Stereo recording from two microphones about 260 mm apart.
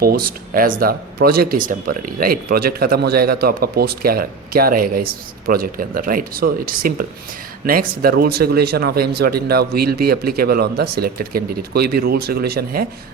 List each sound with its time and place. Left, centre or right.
0.0 s speech: right